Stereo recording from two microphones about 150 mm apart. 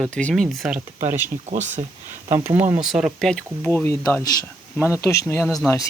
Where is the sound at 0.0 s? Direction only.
10° left (ahead or behind).